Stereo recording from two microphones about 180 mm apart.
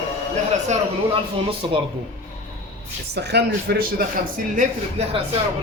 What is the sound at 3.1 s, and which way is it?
Speech, 70° right (ahead or behind).